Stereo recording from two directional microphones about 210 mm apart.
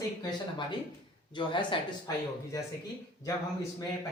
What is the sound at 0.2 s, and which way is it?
Speech, 20° left (ahead or behind).